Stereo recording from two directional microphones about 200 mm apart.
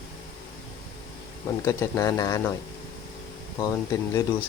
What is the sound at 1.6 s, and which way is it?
Speech, 15° left (ahead or behind).